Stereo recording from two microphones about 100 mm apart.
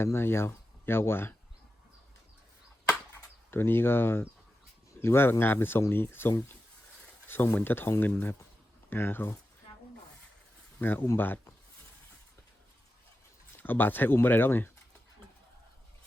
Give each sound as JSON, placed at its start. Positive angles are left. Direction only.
{"t": 0.0, "sound": "speech", "side_deg": 25}
{"t": 3.5, "sound": "speech", "side_deg": 25}
{"t": 10.8, "sound": "speech", "side_deg": 20}
{"t": 13.6, "sound": "speech", "side_deg": 20}